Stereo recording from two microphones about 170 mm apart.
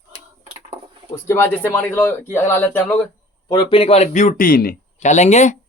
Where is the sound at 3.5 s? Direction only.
30° left (ahead or behind).